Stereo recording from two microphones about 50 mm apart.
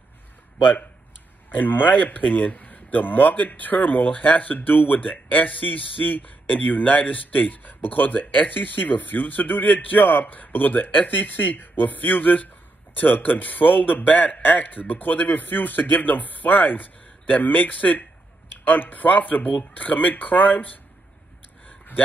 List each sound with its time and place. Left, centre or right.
1.5 s speech: left